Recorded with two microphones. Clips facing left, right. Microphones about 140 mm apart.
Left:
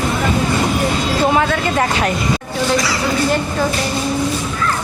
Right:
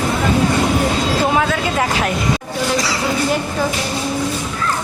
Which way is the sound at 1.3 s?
Centre (ahead or behind).